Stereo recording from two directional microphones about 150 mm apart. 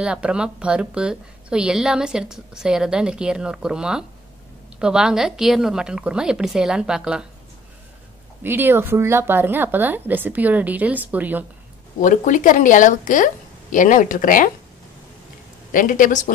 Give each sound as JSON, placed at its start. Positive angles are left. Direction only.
{"t": 0.0, "sound": "a woman's voice", "side_deg": -5}
{"t": 8.4, "sound": "speech", "side_deg": -15}
{"t": 12.0, "sound": "a woman's voice", "side_deg": 60}
{"t": 15.7, "sound": "a woman's voice", "side_deg": 65}